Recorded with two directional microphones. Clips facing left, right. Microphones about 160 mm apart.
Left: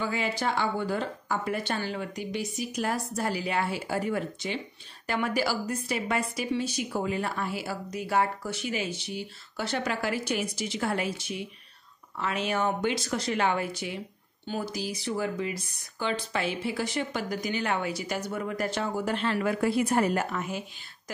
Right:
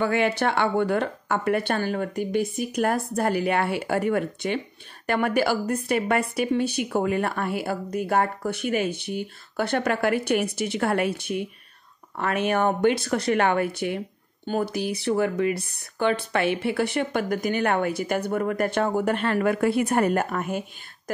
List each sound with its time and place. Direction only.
0.0 s speech: 65° right (ahead or behind)